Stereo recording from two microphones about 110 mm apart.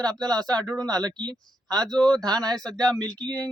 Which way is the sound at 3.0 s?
40° right (ahead or behind).